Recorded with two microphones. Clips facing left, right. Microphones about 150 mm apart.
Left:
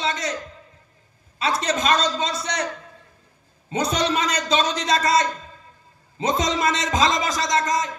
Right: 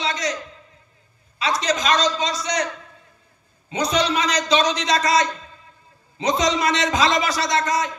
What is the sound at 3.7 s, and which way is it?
A man's voice, 50° left (ahead or behind).